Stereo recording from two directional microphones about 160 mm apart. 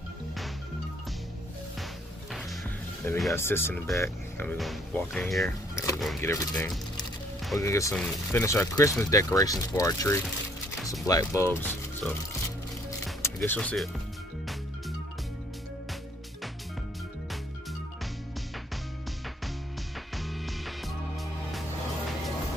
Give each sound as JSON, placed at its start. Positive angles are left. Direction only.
{"t": 3.0, "sound": "speech", "side_deg": 15}
{"t": 5.4, "sound": "speech", "side_deg": 20}
{"t": 5.9, "sound": "speech", "side_deg": 0}
{"t": 7.6, "sound": "speech", "side_deg": 20}
{"t": 13.5, "sound": "speech", "side_deg": 5}
{"t": 20.2, "sound": "music", "side_deg": 0}